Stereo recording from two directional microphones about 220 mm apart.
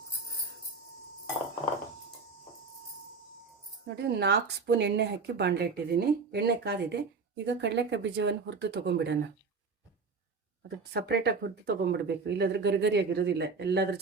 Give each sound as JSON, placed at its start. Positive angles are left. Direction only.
{"t": 3.8, "sound": "speech", "side_deg": -50}
{"t": 10.9, "sound": "speech", "side_deg": -50}